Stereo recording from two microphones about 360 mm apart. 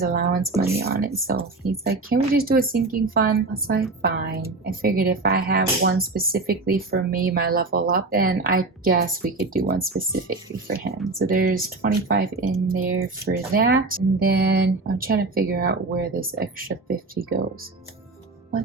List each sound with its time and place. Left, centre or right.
0.1 s speech: right
0.5 s speech: centre
0.8 s speech: right